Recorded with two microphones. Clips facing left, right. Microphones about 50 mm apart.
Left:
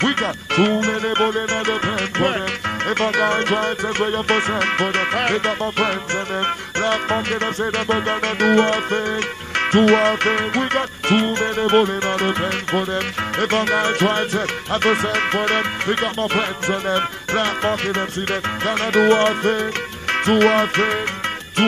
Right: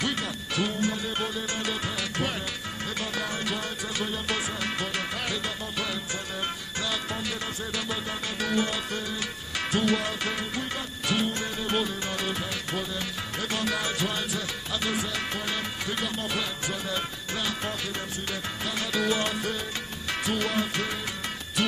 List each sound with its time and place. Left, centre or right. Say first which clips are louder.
0.0 s music: left 10 dB; left